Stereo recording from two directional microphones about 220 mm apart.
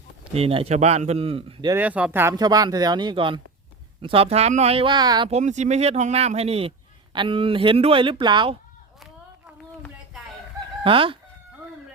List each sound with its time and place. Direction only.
0.3 s speech: 25° right (ahead or behind)
1.7 s speech: 5° right (ahead or behind)
10.8 s speech: 25° right (ahead or behind)